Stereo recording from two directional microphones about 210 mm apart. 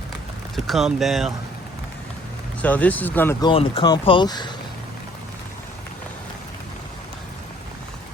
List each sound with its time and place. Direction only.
0.5 s speech: centre (ahead or behind)
2.6 s speech: 5° left (ahead or behind)
3.4 s speech: 25° left (ahead or behind)